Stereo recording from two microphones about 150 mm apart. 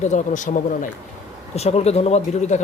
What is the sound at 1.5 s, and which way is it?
Speech, 45° left (ahead or behind).